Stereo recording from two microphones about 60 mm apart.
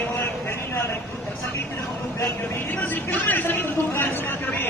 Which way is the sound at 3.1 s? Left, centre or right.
Left.